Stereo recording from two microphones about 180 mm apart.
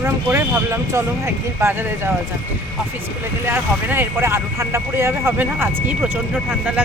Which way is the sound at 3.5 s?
10° right (ahead or behind).